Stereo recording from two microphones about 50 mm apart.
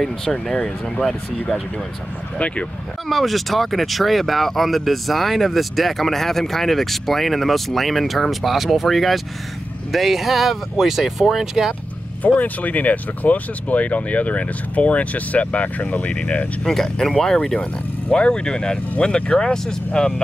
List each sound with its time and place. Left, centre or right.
0.0 s speech: centre
2.3 s speech: left
3.1 s speech: centre
12.2 s speech: left
16.6 s speech: centre